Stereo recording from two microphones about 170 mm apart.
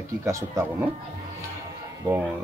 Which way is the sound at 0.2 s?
15° right (ahead or behind).